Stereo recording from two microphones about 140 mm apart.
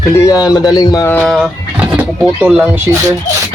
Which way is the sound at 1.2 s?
5° right (ahead or behind).